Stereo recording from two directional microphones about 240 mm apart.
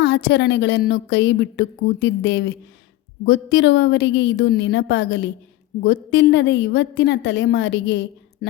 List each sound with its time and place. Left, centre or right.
0.0 s a woman's voice: left